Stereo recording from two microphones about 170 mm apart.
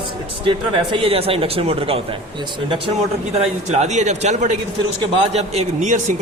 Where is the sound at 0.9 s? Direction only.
35° right (ahead or behind).